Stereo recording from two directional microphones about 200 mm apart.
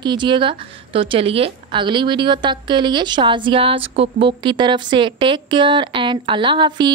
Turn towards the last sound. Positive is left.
turn(degrees=-20)  # may be behind; listen again after turning